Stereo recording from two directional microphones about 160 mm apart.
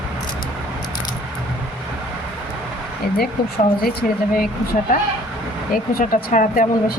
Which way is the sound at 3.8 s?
70° left (ahead or behind).